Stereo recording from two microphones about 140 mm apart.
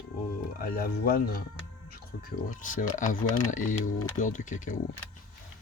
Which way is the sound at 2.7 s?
65° left (ahead or behind).